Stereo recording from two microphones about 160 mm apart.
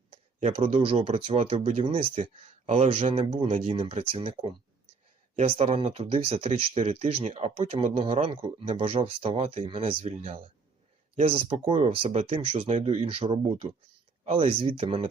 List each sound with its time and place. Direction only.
0.3 s speech: 35° right (ahead or behind)